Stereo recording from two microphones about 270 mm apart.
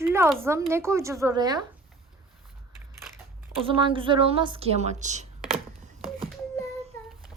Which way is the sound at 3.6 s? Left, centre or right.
Centre.